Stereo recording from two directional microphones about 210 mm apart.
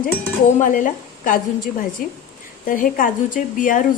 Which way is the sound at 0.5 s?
40° left (ahead or behind).